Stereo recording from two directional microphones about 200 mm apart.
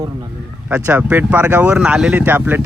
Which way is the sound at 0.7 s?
5° right (ahead or behind).